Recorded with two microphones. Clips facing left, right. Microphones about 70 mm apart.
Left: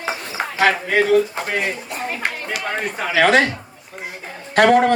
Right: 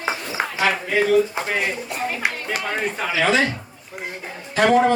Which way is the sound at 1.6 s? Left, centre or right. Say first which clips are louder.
Even; centre.